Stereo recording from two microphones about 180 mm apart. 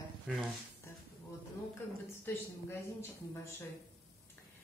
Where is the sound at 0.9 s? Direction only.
15° left (ahead or behind).